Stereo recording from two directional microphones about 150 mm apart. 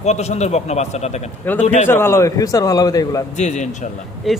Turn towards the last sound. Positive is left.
turn(degrees=0)  # may be behind; listen again after turning